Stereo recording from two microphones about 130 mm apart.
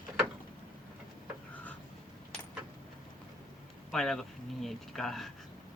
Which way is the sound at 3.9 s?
Centre (ahead or behind).